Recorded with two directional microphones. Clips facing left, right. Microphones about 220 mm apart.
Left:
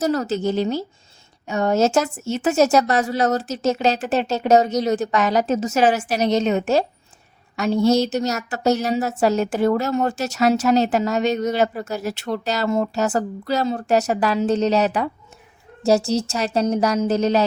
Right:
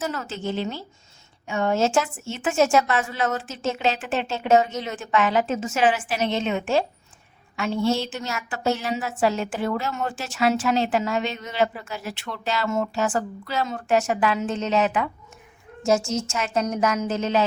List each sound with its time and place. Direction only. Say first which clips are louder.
0.0 s a woman's voice: left 8 dB; 40° left (ahead or behind)